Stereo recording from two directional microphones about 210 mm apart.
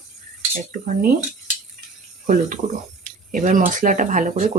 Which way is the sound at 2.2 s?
40° right (ahead or behind).